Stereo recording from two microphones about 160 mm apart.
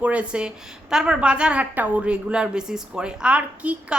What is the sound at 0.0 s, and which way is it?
A woman's voice, 10° right (ahead or behind).